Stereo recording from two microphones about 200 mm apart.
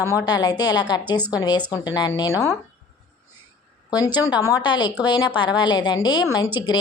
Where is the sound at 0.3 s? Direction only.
20° left (ahead or behind).